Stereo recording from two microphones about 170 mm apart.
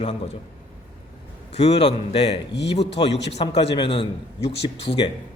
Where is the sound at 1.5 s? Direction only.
40° left (ahead or behind).